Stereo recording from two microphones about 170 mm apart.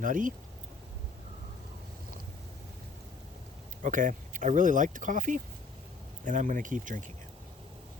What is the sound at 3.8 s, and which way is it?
Speech, 50° right (ahead or behind).